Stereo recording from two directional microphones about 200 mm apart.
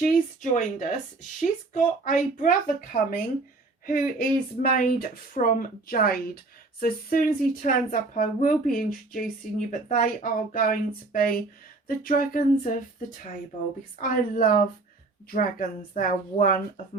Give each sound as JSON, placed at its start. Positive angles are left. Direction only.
{"t": 0.0, "sound": "speech", "side_deg": 40}